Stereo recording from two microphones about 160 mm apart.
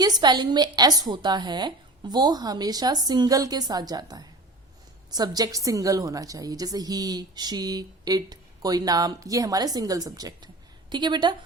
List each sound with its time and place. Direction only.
0.0 s a woman's voice: 25° right (ahead or behind)